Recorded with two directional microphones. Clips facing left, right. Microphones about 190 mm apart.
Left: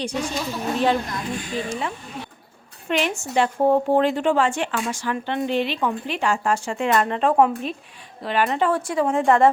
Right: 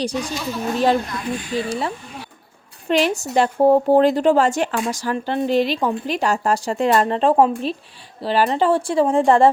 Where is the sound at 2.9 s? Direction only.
35° right (ahead or behind).